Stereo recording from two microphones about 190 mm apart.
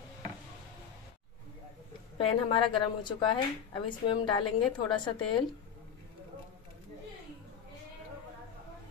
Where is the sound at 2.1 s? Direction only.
25° left (ahead or behind).